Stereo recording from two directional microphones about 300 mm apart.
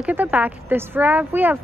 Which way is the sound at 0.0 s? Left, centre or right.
Centre.